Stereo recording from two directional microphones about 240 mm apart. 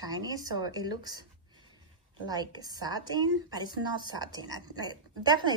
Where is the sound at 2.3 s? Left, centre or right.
Centre.